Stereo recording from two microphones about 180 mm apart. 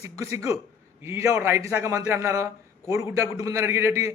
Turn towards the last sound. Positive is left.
turn(degrees=-15)  # may be behind; listen again after turning